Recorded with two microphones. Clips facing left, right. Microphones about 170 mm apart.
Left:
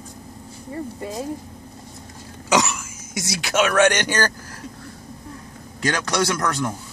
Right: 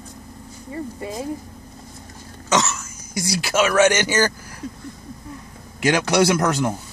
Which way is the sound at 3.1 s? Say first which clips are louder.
Right 1 dB; centre (ahead or behind).